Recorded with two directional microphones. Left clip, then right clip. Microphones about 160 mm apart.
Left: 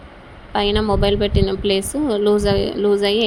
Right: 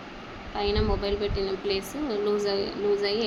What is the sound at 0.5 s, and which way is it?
Speech, 50° left (ahead or behind).